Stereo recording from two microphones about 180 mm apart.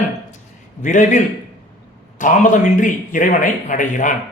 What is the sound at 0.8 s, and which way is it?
Speech, 45° left (ahead or behind).